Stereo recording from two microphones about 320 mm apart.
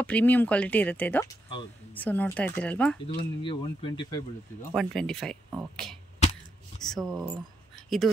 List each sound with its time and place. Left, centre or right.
0.0 s speech: centre
3.4 s speech: centre
4.7 s speech: centre